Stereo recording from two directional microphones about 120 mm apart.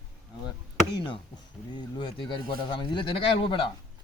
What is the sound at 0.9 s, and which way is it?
Speech, 45° left (ahead or behind).